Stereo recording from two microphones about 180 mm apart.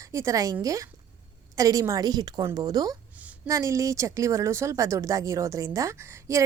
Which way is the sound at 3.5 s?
20° right (ahead or behind).